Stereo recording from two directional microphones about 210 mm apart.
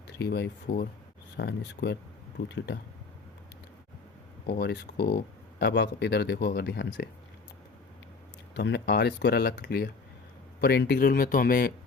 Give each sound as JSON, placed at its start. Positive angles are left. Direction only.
{"t": 0.1, "sound": "speech", "side_deg": 50}
{"t": 4.4, "sound": "speech", "side_deg": 50}
{"t": 8.5, "sound": "speech", "side_deg": 55}